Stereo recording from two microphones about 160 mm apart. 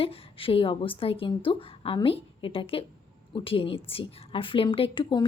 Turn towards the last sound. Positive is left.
turn(degrees=30)  # may be behind; listen again after turning